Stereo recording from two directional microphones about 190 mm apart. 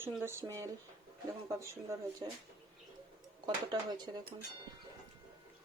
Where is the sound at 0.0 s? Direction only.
10° right (ahead or behind).